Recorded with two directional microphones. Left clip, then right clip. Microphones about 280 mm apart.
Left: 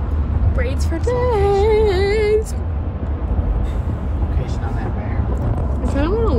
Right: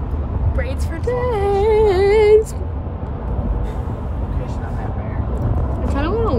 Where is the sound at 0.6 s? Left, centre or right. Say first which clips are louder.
Left 3 dB; centre.